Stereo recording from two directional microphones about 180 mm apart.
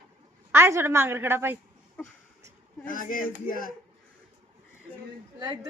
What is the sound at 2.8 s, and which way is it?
Speech, 50° left (ahead or behind).